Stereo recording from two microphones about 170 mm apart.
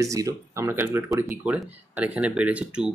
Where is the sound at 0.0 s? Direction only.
20° right (ahead or behind).